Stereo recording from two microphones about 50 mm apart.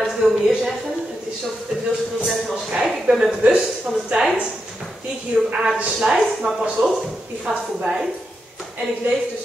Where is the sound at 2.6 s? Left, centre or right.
Centre.